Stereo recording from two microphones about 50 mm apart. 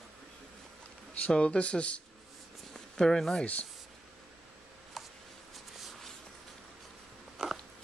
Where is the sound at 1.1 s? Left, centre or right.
Left.